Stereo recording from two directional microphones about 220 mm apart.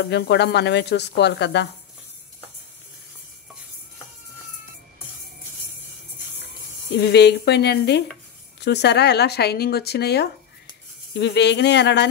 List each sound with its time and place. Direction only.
0.1 s speech: 50° left (ahead or behind)
6.9 s speech: 50° left (ahead or behind)